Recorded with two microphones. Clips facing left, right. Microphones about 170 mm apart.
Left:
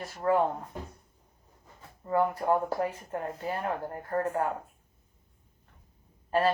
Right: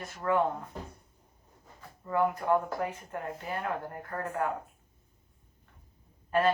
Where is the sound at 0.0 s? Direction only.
30° left (ahead or behind).